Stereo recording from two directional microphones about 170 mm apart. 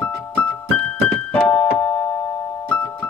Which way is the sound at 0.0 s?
10° left (ahead or behind).